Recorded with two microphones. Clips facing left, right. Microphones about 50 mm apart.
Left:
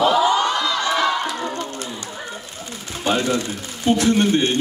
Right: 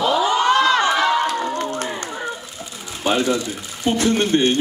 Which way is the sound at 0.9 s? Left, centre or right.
Centre.